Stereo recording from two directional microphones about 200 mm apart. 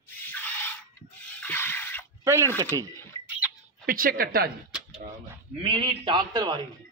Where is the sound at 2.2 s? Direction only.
15° right (ahead or behind).